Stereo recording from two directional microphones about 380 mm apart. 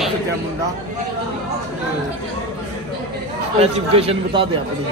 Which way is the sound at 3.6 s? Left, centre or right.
Centre.